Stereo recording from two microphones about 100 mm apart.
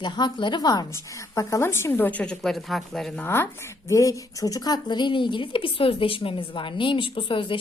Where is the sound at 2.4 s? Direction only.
Centre (ahead or behind).